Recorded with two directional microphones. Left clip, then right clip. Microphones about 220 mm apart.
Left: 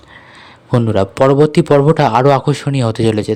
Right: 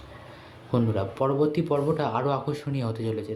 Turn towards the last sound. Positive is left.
turn(degrees=50)  # may be behind; listen again after turning